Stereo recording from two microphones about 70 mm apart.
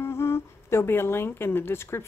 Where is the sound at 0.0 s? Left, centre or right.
Left.